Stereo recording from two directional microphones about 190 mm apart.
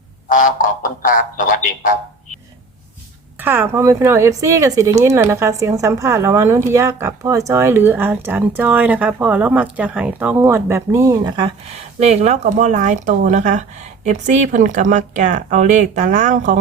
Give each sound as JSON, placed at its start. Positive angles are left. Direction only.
{"t": 0.3, "sound": "speech", "side_deg": 45}
{"t": 3.4, "sound": "a woman's voice", "side_deg": -10}
{"t": 11.9, "sound": "speech", "side_deg": -35}